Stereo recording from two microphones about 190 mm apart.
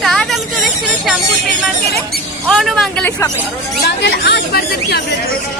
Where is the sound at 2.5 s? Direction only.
Centre (ahead or behind).